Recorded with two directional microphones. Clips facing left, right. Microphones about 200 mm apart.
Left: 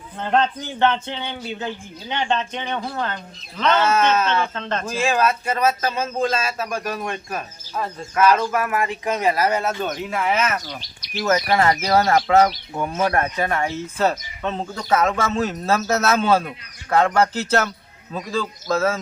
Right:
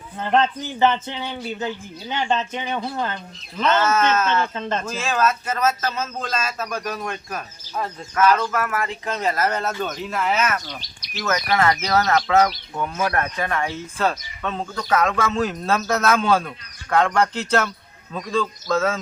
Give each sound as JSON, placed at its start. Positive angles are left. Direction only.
{"t": 0.8, "sound": "speech", "side_deg": -5}
{"t": 3.8, "sound": "speech", "side_deg": 10}
{"t": 4.5, "sound": "speech", "side_deg": -10}
{"t": 4.9, "sound": "speech", "side_deg": 10}
{"t": 11.2, "sound": "speech", "side_deg": 30}
{"t": 15.4, "sound": "speech", "side_deg": 5}